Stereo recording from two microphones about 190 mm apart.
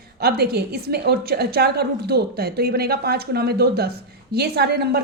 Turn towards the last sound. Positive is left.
turn(degrees=-60)  # may be behind; listen again after turning